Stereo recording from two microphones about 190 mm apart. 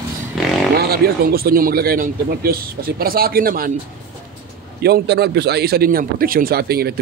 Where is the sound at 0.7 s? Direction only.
55° right (ahead or behind).